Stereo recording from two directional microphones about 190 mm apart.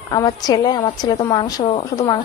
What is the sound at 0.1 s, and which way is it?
A woman's voice, 20° left (ahead or behind).